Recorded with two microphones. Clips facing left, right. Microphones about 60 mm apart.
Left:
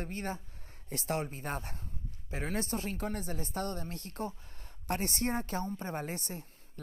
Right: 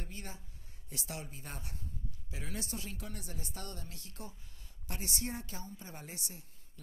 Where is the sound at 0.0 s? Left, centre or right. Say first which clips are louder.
Left 10 dB; left.